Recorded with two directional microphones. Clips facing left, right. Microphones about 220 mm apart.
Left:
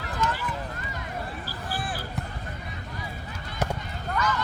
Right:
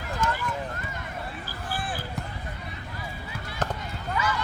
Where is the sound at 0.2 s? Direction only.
50° right (ahead or behind).